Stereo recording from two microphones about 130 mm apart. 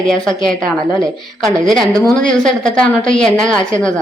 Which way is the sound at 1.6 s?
Centre (ahead or behind).